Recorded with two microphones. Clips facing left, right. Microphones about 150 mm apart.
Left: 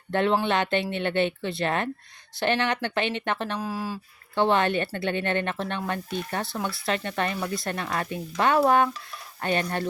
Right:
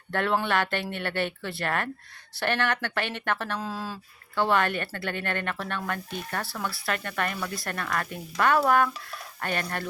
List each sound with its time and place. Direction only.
0.1 s speech: 20° left (ahead or behind)
4.4 s speech: 25° left (ahead or behind)